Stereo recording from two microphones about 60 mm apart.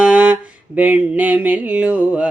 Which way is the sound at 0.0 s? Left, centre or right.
Right.